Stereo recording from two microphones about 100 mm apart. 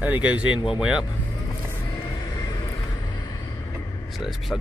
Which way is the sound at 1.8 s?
40° left (ahead or behind).